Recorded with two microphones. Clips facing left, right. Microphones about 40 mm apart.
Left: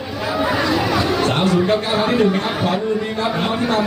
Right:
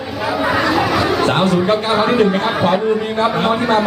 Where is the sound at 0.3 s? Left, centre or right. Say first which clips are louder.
Right 2 dB; centre.